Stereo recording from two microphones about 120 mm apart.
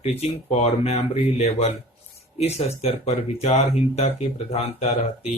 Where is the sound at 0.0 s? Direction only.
65° left (ahead or behind).